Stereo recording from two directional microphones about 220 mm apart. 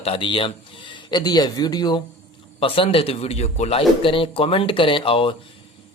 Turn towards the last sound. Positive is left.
turn(degrees=25)  # may be behind; listen again after turning